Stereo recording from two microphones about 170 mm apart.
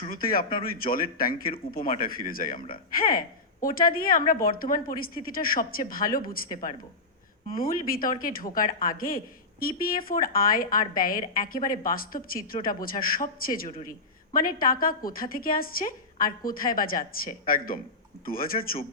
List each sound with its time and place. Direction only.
0.1 s speech: 55° left (ahead or behind)
2.6 s speech: 30° left (ahead or behind)
2.9 s speech: 55° left (ahead or behind)